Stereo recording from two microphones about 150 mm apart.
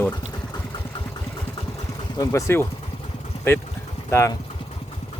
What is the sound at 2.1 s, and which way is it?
Speech, 15° left (ahead or behind).